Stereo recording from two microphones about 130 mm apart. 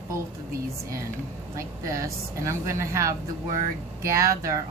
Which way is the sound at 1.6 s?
25° right (ahead or behind).